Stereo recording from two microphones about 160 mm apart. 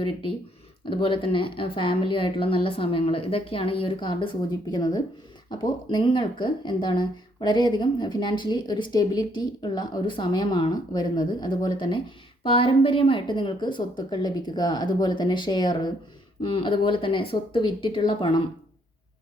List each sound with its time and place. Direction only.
0.9 s a woman's voice: 30° left (ahead or behind)